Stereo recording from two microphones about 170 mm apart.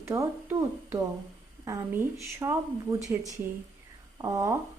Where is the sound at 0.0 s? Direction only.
15° right (ahead or behind).